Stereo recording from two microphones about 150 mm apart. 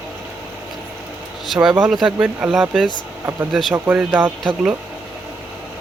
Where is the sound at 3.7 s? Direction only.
15° right (ahead or behind).